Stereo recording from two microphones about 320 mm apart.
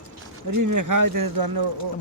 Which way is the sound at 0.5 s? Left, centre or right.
Right.